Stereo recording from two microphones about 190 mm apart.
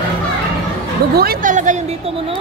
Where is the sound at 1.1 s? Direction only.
55° right (ahead or behind).